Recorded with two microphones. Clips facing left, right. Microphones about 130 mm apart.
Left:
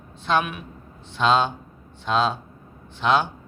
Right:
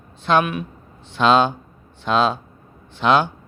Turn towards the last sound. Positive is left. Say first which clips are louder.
# right 4 dB
turn(degrees=-75)  # may be behind; listen again after turning